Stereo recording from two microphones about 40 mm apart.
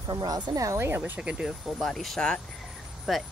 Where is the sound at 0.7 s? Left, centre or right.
Right.